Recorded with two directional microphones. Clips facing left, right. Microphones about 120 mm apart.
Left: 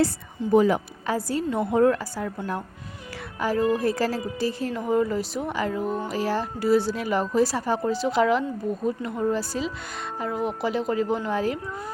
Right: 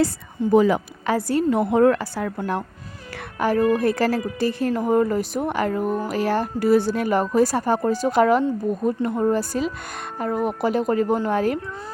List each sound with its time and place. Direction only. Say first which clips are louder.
0.4 s a woman's voice: right 4 dB; 55° right (ahead or behind)
1.0 s a woman's voice: right 7 dB; 70° right (ahead or behind)
3.3 s a woman's voice: right 4 dB; 60° right (ahead or behind)
9.0 s speech: right 7 dB; 35° right (ahead or behind)
9.2 s a woman's voice: right 2 dB; 50° right (ahead or behind)